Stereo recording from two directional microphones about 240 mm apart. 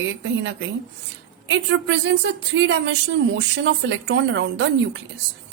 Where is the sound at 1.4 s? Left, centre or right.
Right.